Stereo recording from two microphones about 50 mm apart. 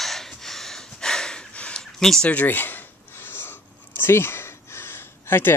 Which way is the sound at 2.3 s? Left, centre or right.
Left.